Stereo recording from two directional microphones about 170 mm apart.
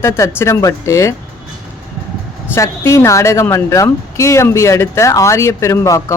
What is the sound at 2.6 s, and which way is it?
Speech, 15° left (ahead or behind).